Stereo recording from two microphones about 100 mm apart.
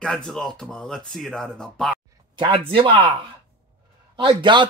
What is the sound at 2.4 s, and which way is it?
A man's voice, 55° right (ahead or behind).